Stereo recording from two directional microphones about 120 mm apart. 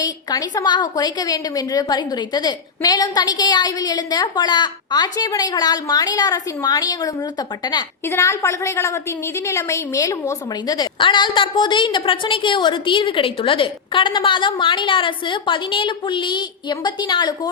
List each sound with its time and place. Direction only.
0.0 s a woman's voice: 35° left (ahead or behind)
8.0 s a woman's voice: 20° left (ahead or behind); by 17.5 s 35° left (ahead or behind)